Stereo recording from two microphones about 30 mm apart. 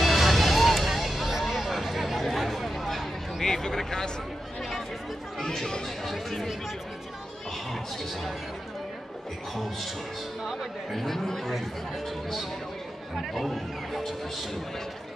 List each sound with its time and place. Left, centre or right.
0.0 s music: centre
1.5 s a sound: centre
3.4 s a sound: centre
5.4 s chatter: centre
10.6 s speech: centre
13.3 s speech: centre